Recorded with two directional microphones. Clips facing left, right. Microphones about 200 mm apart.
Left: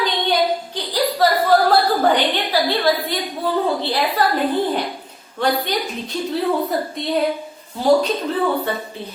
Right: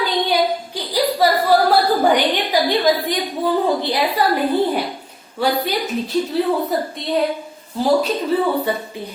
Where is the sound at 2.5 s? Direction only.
15° right (ahead or behind).